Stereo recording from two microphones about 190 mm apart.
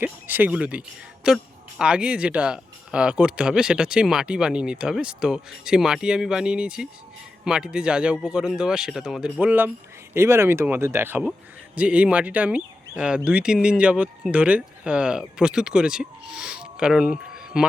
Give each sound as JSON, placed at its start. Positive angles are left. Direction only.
{"t": 0.0, "sound": "speech", "side_deg": -10}